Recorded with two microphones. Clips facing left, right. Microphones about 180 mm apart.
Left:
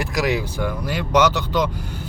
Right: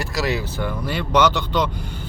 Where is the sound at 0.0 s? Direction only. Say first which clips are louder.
Left 2 dB; 15° left (ahead or behind).